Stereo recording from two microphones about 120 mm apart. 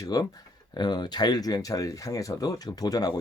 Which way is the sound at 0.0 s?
30° left (ahead or behind).